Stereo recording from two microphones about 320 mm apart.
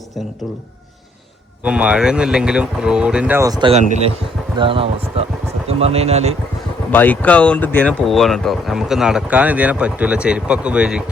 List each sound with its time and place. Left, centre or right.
1.6 s speech: centre
6.9 s speech: centre